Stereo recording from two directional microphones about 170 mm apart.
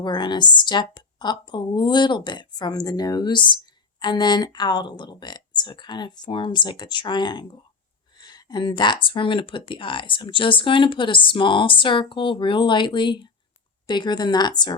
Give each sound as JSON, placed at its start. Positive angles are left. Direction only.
{"t": 0.0, "sound": "speech", "side_deg": 25}